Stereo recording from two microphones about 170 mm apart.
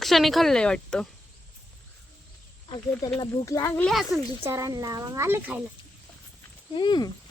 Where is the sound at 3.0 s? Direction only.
20° left (ahead or behind).